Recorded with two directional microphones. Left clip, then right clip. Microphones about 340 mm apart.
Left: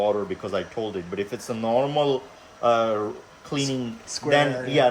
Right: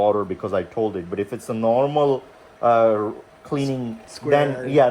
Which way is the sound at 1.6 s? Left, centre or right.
Centre.